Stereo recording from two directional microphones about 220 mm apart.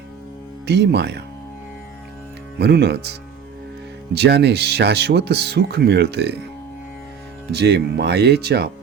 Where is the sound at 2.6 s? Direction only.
50° right (ahead or behind).